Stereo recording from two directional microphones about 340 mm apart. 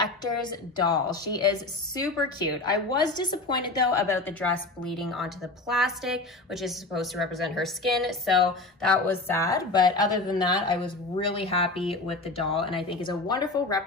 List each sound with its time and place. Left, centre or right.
0.2 s a woman's voice: centre